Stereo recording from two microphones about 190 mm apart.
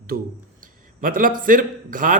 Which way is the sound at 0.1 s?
50° right (ahead or behind).